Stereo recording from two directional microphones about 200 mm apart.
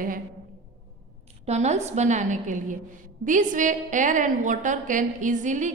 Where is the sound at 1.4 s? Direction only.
35° right (ahead or behind).